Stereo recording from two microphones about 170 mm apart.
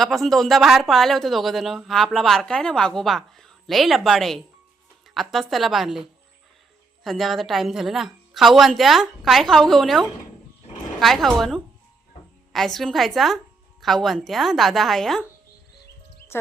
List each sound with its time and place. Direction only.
0.0 s speech: centre (ahead or behind)